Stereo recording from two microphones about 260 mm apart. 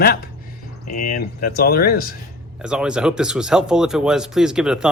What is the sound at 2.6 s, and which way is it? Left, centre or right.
Speech, centre.